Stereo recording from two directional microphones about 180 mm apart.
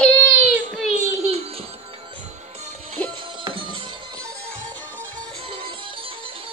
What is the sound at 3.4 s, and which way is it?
Music, 30° right (ahead or behind).